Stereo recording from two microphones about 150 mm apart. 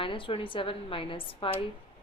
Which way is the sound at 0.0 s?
35° left (ahead or behind).